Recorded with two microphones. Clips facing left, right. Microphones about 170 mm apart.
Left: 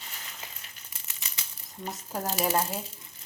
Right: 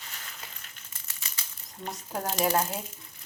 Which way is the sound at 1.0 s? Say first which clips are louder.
Left 1 dB; 20° left (ahead or behind).